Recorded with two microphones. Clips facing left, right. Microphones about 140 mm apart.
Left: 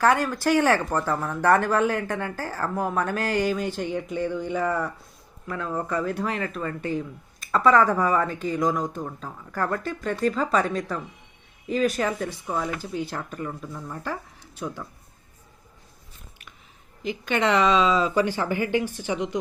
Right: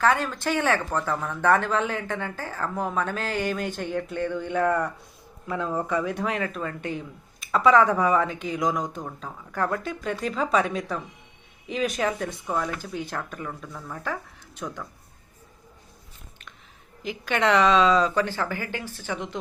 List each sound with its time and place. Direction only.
0.0 s speech: 10° left (ahead or behind)
5.5 s speech: 15° right (ahead or behind)
5.9 s speech: centre (ahead or behind)
17.0 s speech: centre (ahead or behind); by 19.4 s 15° left (ahead or behind)